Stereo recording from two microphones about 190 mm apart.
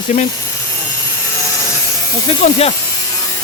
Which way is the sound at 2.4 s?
35° left (ahead or behind).